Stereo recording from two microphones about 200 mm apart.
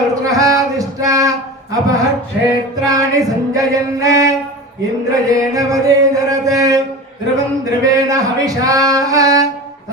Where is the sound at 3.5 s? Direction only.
15° right (ahead or behind).